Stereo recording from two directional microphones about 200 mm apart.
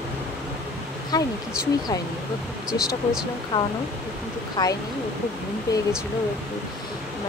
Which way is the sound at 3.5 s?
20° left (ahead or behind).